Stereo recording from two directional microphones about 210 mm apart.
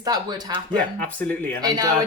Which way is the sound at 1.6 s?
20° right (ahead or behind).